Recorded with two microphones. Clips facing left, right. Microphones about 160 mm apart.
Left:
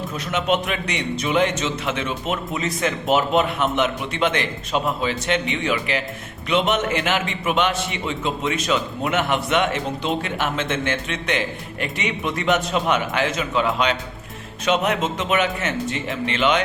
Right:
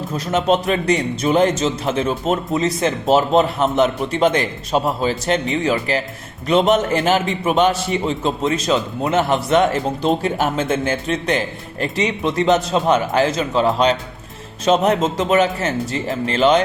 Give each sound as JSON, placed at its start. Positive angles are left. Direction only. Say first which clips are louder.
{"t": 0.1, "sound": "a man's voice", "louder": "right 5 dB", "side_deg": -35}